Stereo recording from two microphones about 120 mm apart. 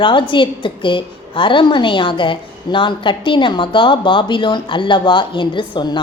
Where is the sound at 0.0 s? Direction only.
45° left (ahead or behind).